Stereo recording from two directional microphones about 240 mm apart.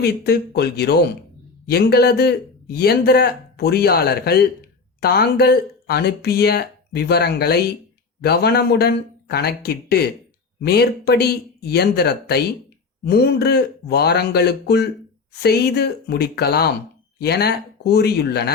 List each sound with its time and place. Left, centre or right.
0.0 s a man's voice: left